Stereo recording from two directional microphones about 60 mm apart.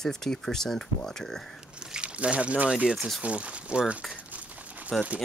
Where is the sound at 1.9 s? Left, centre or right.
Centre.